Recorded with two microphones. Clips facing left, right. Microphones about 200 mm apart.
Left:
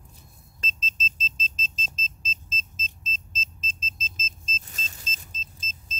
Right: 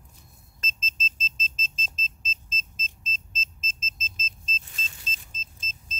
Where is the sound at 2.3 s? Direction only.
40° left (ahead or behind).